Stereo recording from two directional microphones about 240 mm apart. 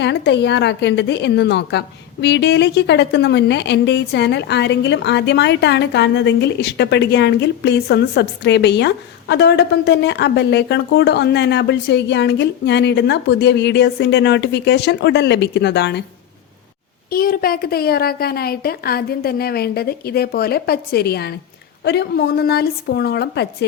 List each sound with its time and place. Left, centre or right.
0.0 s a woman's voice: left
17.1 s a woman's voice: left